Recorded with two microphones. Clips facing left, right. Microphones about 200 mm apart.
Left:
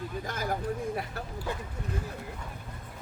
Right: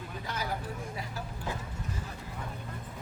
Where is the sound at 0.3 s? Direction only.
50° left (ahead or behind).